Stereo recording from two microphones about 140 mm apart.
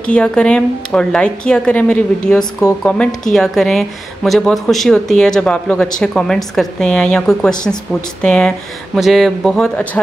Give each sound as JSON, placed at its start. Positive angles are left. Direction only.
{"t": 0.0, "sound": "a woman's voice", "side_deg": 5}